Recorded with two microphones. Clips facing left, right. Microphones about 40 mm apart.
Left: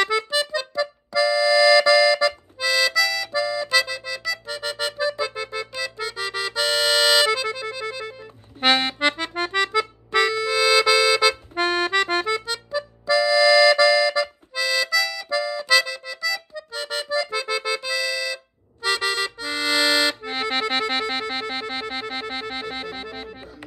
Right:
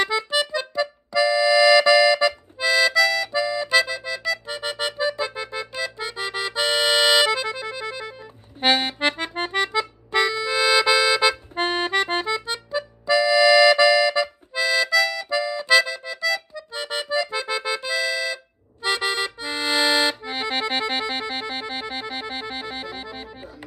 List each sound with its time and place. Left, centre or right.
0.3 s music: right
0.7 s accordion: right
4.2 s music: centre
9.0 s accordion: centre
14.2 s accordion: centre
20.5 s music: centre